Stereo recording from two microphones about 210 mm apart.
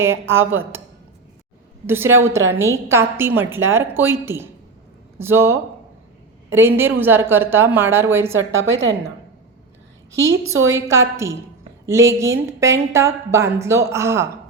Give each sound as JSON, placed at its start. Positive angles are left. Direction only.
{"t": 0.0, "sound": "speech", "side_deg": -10}
{"t": 1.9, "sound": "speech", "side_deg": -10}
{"t": 8.6, "sound": "a woman's voice", "side_deg": -70}
{"t": 10.7, "sound": "speech", "side_deg": -15}